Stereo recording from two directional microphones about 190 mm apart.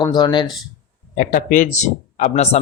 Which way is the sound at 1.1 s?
45° left (ahead or behind).